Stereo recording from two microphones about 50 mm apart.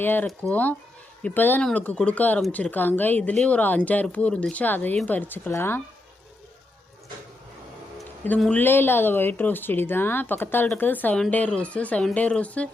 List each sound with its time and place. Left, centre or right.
0.0 s speech: left
0.5 s speech: left
1.7 s speech: left
4.5 s speech: left
5.5 s speech: left
8.5 s speech: left